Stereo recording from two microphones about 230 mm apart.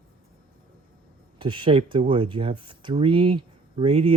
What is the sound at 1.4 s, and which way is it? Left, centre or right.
Speech, right.